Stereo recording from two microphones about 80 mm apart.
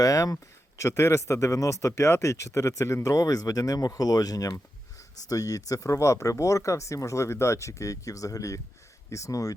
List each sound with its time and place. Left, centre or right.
0.0 s speech: left